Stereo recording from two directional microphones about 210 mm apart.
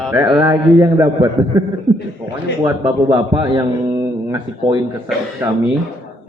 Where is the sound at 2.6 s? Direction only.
15° right (ahead or behind).